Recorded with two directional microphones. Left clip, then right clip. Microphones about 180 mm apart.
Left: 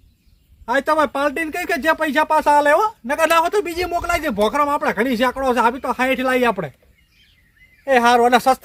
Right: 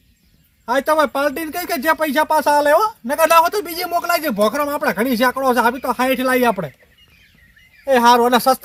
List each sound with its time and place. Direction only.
0.6 s speech: 20° left (ahead or behind)
7.9 s speech: 15° left (ahead or behind)